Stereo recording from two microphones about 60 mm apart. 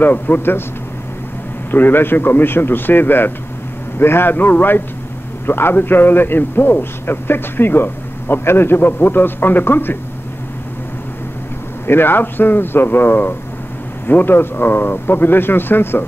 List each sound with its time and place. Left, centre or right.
0.0 s a man's voice: left
1.7 s a man's voice: left
11.9 s a man's voice: left